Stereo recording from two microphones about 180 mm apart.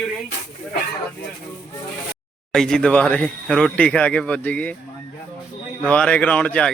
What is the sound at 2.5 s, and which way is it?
Speech, 5° left (ahead or behind).